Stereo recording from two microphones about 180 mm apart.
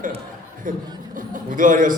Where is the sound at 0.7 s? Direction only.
45° right (ahead or behind).